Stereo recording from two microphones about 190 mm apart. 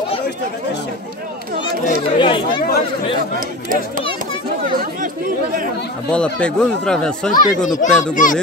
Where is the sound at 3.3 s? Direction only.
45° right (ahead or behind).